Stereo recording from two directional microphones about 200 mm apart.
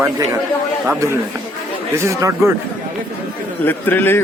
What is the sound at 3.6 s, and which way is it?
Speech, 10° left (ahead or behind).